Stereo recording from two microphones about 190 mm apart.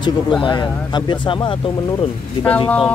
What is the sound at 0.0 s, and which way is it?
Speech, 25° left (ahead or behind).